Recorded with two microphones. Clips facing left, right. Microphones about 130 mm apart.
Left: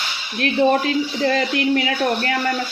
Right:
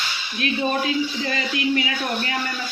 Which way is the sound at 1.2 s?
55° left (ahead or behind).